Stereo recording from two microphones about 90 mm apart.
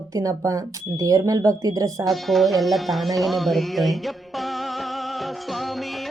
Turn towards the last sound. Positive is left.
turn(degrees=0)  # may be behind; listen again after turning